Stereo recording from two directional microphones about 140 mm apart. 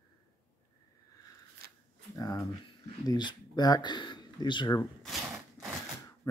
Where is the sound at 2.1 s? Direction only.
30° left (ahead or behind).